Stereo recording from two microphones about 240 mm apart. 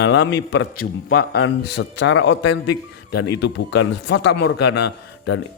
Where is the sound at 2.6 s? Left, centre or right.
Left.